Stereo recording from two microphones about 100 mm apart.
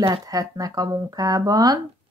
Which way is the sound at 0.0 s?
40° right (ahead or behind).